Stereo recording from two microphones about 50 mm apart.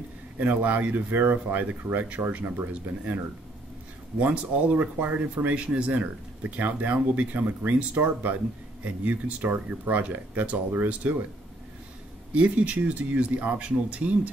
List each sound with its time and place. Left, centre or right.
0.4 s speech: right
4.2 s speech: right
5.5 s speech: right
12.4 s speech: right